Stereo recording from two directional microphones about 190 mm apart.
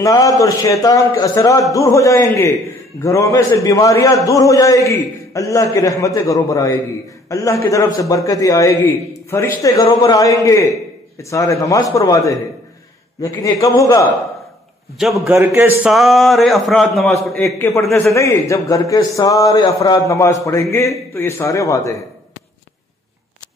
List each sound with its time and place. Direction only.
0.0 s a man's voice: 15° left (ahead or behind)
15.0 s a man's voice: centre (ahead or behind)
18.0 s a man's voice: 15° left (ahead or behind)